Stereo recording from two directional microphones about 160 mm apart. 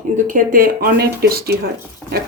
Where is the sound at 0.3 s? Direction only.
60° right (ahead or behind).